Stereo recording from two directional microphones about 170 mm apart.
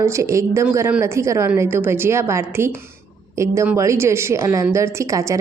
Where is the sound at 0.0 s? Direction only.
15° right (ahead or behind).